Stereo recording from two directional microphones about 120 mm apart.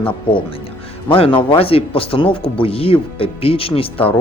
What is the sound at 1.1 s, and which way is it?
Speech, 50° left (ahead or behind).